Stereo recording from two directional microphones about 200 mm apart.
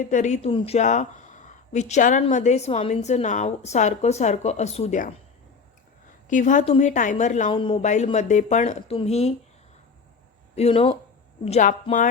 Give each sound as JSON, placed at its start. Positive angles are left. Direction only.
{"t": 0.0, "sound": "speech", "side_deg": 35}
{"t": 6.2, "sound": "speech", "side_deg": 40}
{"t": 7.5, "sound": "speech", "side_deg": 25}
{"t": 10.5, "sound": "speech", "side_deg": 30}